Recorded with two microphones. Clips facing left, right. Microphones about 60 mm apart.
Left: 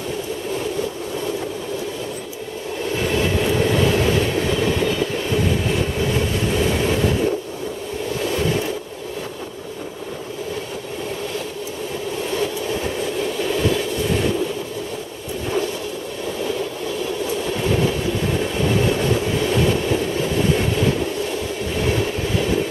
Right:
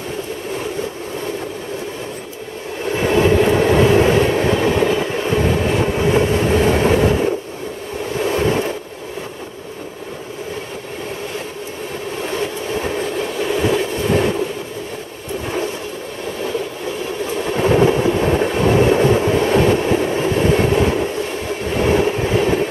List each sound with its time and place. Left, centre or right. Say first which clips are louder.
3.0 s train: right 7 dB; right
8.2 s a sound: right 5 dB; right
12.4 s train: right 1 dB; right
17.6 s train: right 9 dB; right